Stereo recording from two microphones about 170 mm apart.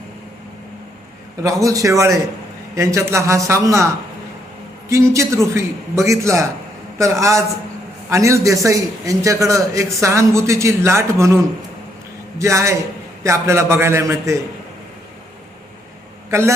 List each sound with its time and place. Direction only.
1.4 s a man's voice: 20° right (ahead or behind)
4.9 s a man's voice: 15° right (ahead or behind)
12.4 s a man's voice: 15° right (ahead or behind)